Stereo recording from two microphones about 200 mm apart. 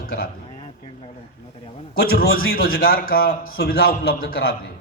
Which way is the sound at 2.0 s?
50° left (ahead or behind).